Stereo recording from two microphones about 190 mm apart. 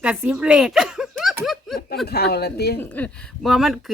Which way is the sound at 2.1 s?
55° left (ahead or behind).